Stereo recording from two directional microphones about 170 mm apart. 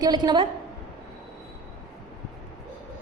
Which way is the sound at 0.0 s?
25° right (ahead or behind).